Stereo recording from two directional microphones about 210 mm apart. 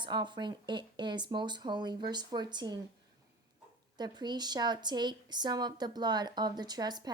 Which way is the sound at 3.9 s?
20° right (ahead or behind).